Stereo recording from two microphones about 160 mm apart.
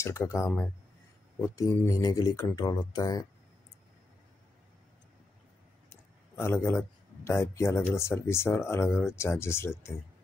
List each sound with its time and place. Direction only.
0.0 s speech: 15° left (ahead or behind)
5.9 s a sound: 15° left (ahead or behind)
7.2 s speech: 15° left (ahead or behind)